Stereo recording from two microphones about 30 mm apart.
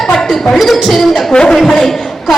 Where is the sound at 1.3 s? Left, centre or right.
Left.